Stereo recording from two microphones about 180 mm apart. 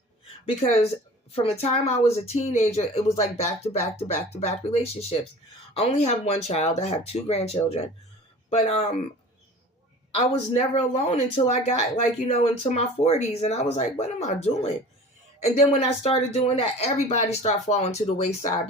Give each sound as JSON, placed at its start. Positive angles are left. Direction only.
{"t": 0.4, "sound": "speech", "side_deg": 35}
{"t": 10.9, "sound": "speech", "side_deg": 35}